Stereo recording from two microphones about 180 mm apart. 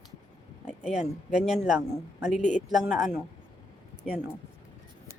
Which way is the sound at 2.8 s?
Centre (ahead or behind).